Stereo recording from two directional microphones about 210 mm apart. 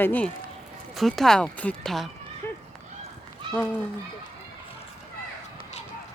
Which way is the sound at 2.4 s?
10° left (ahead or behind).